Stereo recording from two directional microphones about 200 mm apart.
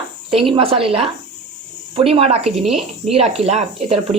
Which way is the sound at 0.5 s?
25° right (ahead or behind).